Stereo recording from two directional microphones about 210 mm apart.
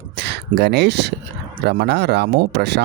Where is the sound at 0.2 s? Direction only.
55° right (ahead or behind).